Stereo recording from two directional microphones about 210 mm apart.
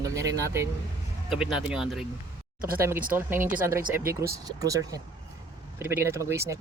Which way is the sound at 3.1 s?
10° right (ahead or behind).